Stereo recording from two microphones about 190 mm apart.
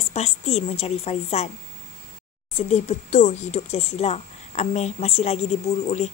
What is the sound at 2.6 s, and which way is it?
Speech, 35° left (ahead or behind).